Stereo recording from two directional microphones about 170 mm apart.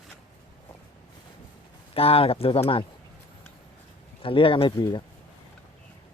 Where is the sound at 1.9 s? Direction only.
35° left (ahead or behind).